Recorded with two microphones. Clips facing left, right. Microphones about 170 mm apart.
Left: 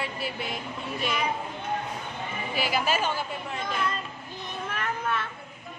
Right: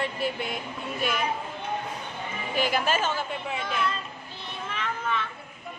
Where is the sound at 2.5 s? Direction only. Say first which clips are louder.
Right 2 dB; 5° left (ahead or behind).